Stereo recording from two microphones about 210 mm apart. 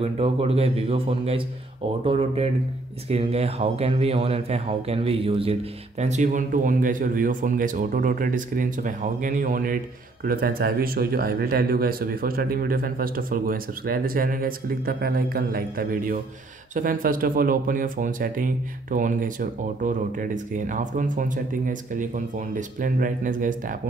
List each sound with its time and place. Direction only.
0.0 s a man's voice: 30° right (ahead or behind)